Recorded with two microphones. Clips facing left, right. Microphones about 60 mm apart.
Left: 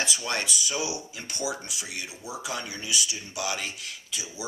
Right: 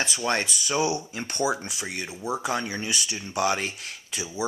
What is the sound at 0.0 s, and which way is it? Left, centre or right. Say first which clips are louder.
Speech: right 4 dB; right.